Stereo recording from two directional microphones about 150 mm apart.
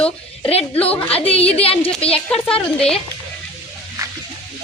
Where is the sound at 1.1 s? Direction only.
40° left (ahead or behind).